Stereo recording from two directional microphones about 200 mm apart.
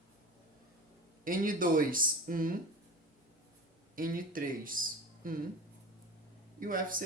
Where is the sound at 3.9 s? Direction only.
45° right (ahead or behind).